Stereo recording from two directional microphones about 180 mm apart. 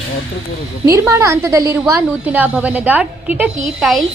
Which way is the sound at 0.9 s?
15° right (ahead or behind).